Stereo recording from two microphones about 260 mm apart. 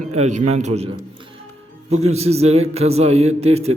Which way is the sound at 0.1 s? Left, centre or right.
Right.